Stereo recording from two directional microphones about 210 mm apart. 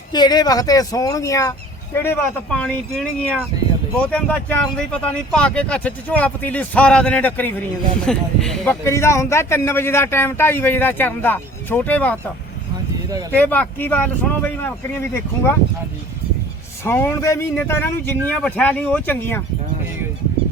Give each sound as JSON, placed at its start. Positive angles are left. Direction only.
{"t": 0.1, "sound": "a man's voice", "side_deg": 20}
{"t": 13.3, "sound": "a man's voice", "side_deg": 10}
{"t": 16.8, "sound": "a man's voice", "side_deg": 10}